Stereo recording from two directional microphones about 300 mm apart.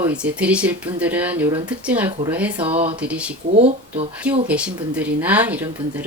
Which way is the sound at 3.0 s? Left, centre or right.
Centre.